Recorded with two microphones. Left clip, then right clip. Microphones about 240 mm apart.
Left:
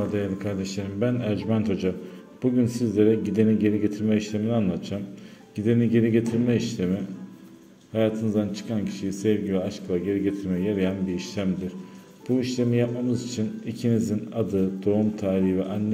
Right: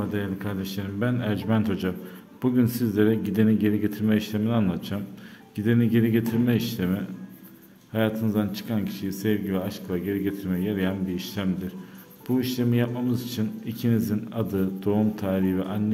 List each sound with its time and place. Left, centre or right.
0.1 s speech: centre